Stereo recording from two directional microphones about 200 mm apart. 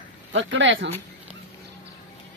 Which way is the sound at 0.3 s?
65° right (ahead or behind).